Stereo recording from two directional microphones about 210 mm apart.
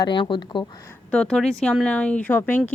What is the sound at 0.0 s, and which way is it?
Speech, 20° left (ahead or behind).